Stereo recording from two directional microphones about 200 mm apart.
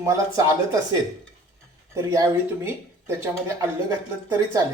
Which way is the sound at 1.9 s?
15° right (ahead or behind).